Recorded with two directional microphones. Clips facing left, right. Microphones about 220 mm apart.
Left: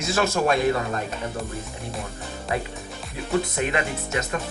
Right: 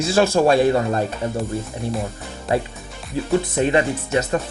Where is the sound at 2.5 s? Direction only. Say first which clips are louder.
Right 7 dB; 30° right (ahead or behind).